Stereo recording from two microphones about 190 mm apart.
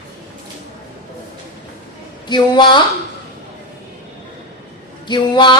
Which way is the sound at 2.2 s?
25° left (ahead or behind).